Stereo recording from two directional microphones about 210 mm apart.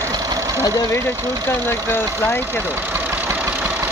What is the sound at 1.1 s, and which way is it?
Speech, 15° right (ahead or behind).